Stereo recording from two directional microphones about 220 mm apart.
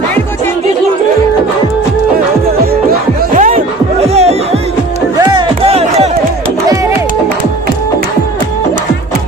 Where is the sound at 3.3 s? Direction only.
35° right (ahead or behind).